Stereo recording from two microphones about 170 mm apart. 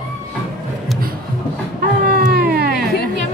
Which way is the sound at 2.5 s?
65° right (ahead or behind).